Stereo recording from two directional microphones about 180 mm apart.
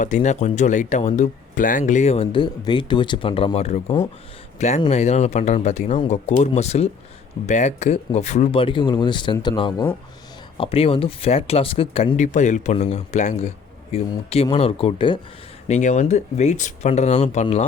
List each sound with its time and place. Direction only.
0.0 s speech: 45° left (ahead or behind)
15.6 s speech: 40° left (ahead or behind)